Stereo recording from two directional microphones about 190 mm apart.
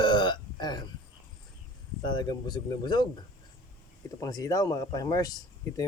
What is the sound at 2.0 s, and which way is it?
Speech, 25° left (ahead or behind).